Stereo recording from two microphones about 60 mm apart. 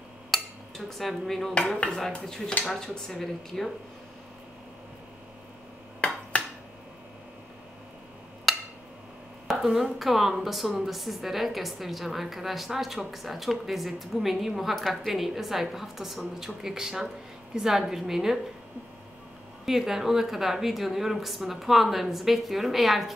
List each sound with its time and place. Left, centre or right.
0.3 s dishes: centre
2.9 s a woman's voice: centre
5.9 s a sound: centre
8.5 s a sound: centre
9.9 s a woman's voice: centre
19.6 s a woman's voice: centre